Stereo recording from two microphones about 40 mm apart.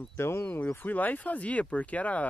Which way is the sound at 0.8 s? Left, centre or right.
Left.